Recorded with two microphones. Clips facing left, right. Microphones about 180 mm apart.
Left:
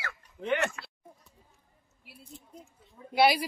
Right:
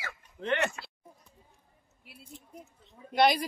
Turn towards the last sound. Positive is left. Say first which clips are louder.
# left 1 dB
turn(degrees=5)  # may be behind; listen again after turning